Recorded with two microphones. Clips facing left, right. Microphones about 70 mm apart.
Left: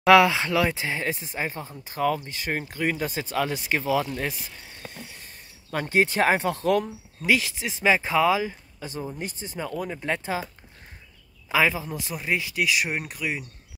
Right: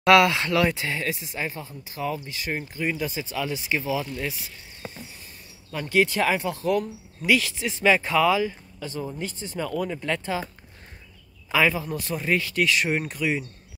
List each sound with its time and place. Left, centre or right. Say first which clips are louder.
0.1 s speech: left 1 dB; left
4.9 s a sound: even; left
5.9 s speech: even; left
6.8 s speech: even; left
11.5 s speech: right 1 dB; centre